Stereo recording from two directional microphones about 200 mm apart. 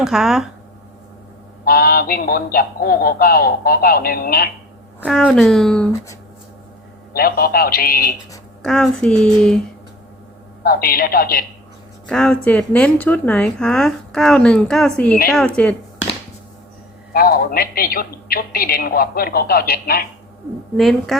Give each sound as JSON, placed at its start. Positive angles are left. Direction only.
{"t": 0.0, "sound": "speech", "side_deg": 0}
{"t": 1.6, "sound": "a woman's voice", "side_deg": 50}
{"t": 4.9, "sound": "speech", "side_deg": -5}
{"t": 7.1, "sound": "a woman's voice", "side_deg": 50}
{"t": 8.6, "sound": "speech", "side_deg": 5}
{"t": 10.6, "sound": "a woman's voice", "side_deg": 45}
{"t": 12.0, "sound": "speech", "side_deg": 5}
{"t": 17.1, "sound": "a woman's voice", "side_deg": 45}
{"t": 20.7, "sound": "speech", "side_deg": 0}